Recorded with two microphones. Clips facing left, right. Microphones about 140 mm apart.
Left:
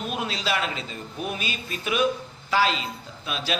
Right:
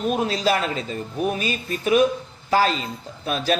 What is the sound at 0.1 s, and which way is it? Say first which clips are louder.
A man's voice: right 6 dB; 40° right (ahead or behind).